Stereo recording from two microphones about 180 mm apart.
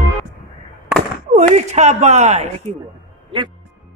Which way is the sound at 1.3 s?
40° right (ahead or behind).